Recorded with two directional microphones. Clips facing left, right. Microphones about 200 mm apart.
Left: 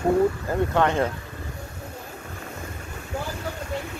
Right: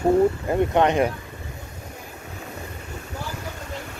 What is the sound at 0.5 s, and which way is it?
Speech, 20° right (ahead or behind).